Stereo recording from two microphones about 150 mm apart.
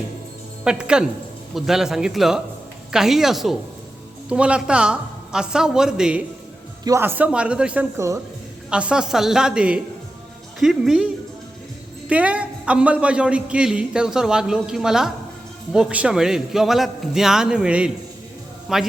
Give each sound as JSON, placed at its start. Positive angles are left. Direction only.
{"t": 0.6, "sound": "a man's voice", "side_deg": -5}
{"t": 6.8, "sound": "a man's voice", "side_deg": -15}
{"t": 7.9, "sound": "a woman's voice", "side_deg": -20}
{"t": 8.7, "sound": "a man's voice", "side_deg": -5}